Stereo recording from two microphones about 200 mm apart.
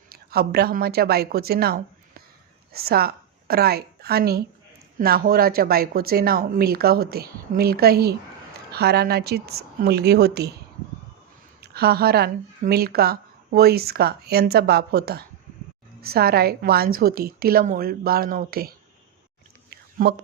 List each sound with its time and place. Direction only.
0.1 s a woman's voice: 50° right (ahead or behind)
11.6 s speech: 50° right (ahead or behind)
19.7 s a sound: 55° right (ahead or behind)